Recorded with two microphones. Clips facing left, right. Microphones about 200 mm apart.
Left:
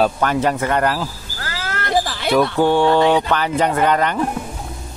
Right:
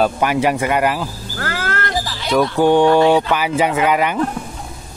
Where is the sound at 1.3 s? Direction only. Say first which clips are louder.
Right 8 dB; 60° right (ahead or behind).